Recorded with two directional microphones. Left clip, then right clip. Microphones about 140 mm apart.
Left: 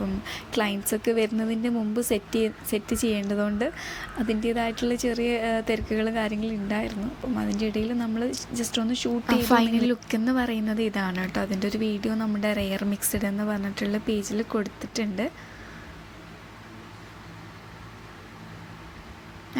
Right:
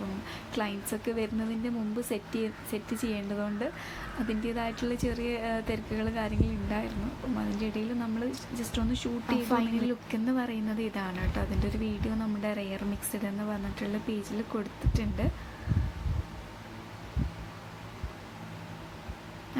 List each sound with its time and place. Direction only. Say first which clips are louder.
0.3 s a woman's voice: left 7 dB; 35° left (ahead or behind)